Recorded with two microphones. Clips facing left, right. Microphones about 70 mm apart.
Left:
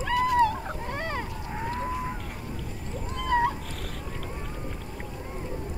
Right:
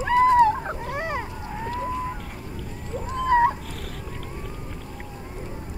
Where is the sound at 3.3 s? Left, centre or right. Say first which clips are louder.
Right 5 dB; right.